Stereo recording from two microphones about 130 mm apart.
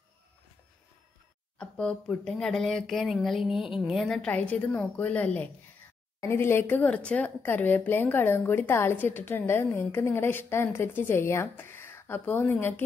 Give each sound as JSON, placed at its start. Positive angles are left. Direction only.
{"t": 1.6, "sound": "a woman's voice", "side_deg": 5}